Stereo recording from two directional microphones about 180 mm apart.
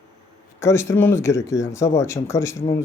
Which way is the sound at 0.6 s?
15° left (ahead or behind).